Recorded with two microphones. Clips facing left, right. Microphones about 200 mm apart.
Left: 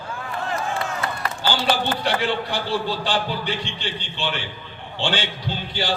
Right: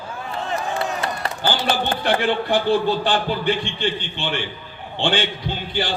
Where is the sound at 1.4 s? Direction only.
50° right (ahead or behind).